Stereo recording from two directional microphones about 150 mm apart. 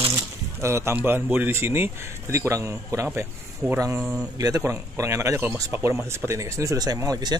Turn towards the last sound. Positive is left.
turn(degrees=-25)  # may be behind; listen again after turning